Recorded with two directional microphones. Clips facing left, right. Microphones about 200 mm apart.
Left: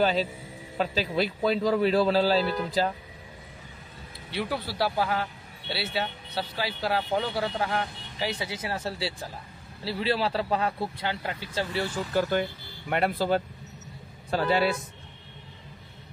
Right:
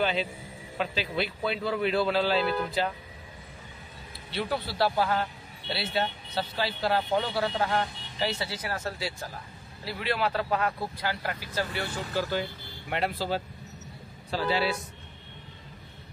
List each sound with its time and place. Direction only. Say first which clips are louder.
0.0 s a man's voice: left 4 dB; 40° left (ahead or behind)
4.3 s a man's voice: even; 10° left (ahead or behind)
12.1 s speech: left 4 dB; 50° left (ahead or behind)